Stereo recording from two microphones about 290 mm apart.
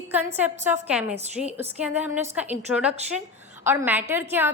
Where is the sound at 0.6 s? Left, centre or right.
Centre.